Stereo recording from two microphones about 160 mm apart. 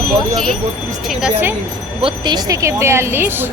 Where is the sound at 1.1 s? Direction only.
10° right (ahead or behind).